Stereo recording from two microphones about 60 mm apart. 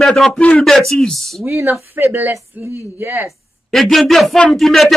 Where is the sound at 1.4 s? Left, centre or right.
Right.